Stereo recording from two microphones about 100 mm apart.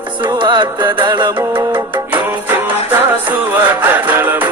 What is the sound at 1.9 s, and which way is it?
Music, 20° right (ahead or behind).